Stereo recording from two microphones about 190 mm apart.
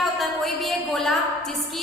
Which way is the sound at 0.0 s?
Centre (ahead or behind).